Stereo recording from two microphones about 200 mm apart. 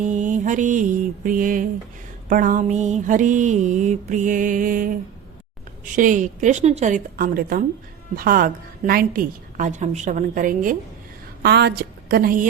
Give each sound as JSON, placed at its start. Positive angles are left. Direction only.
{"t": 0.0, "sound": "mantra", "side_deg": -40}
{"t": 8.1, "sound": "a woman's voice", "side_deg": -45}
{"t": 11.4, "sound": "a woman's voice", "side_deg": -55}